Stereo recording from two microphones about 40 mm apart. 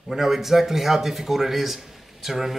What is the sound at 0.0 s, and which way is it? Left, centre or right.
Speech, centre.